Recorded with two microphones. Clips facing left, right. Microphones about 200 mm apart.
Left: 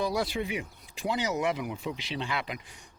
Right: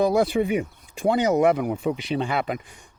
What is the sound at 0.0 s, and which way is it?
Speech, 50° right (ahead or behind).